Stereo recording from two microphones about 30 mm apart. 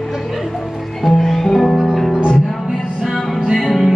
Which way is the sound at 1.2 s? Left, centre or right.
Centre.